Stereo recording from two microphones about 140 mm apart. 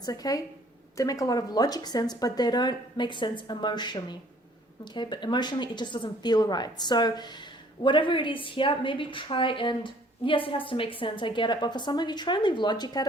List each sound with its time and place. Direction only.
0.0 s a woman's voice: 25° left (ahead or behind)